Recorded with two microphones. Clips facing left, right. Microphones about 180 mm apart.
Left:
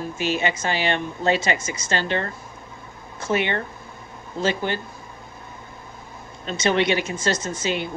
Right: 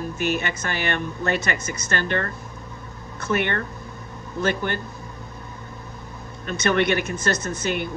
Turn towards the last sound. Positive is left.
turn(degrees=-55)  # may be behind; listen again after turning